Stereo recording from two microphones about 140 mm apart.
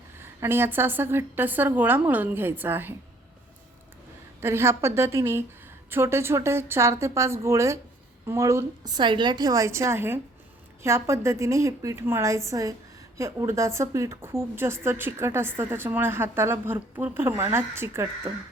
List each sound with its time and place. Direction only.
0.2 s a woman's voice: 15° right (ahead or behind)
4.4 s a woman's voice: 20° right (ahead or behind)